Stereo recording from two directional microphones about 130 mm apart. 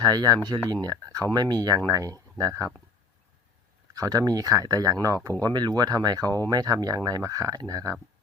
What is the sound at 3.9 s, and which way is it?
Speech, 30° right (ahead or behind).